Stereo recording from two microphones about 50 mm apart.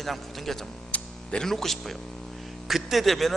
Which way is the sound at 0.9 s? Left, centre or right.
Left.